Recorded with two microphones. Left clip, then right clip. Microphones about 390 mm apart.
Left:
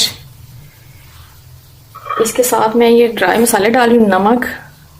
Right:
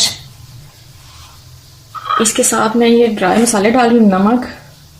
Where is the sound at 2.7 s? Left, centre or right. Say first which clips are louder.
Left 2 dB; left.